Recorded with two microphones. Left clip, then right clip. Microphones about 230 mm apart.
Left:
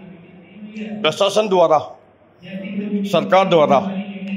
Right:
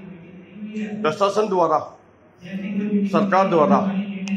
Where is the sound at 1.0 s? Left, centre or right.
Left.